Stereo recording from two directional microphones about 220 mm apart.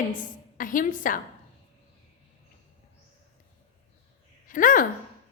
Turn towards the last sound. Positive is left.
turn(degrees=35)  # may be behind; listen again after turning